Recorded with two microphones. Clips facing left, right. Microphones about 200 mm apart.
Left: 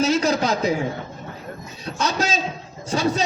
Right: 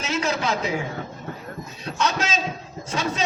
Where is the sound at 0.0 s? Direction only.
35° left (ahead or behind).